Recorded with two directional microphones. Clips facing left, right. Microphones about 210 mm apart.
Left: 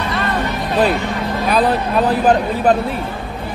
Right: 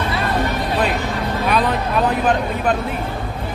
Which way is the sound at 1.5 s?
35° left (ahead or behind).